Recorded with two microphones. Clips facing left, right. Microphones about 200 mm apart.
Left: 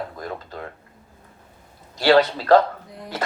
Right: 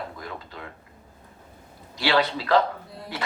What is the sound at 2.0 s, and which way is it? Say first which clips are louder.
Speech: left 7 dB; 45° left (ahead or behind).